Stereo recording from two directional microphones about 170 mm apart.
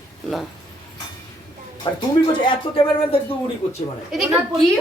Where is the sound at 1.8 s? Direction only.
30° left (ahead or behind).